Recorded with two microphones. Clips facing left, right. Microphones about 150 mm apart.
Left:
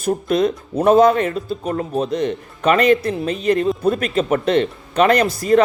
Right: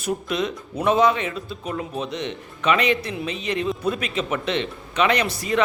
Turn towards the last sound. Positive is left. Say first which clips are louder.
# left 8 dB
turn(degrees=45)  # may be behind; listen again after turning